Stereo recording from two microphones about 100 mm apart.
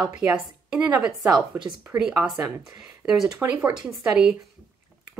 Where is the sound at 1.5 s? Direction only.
20° right (ahead or behind).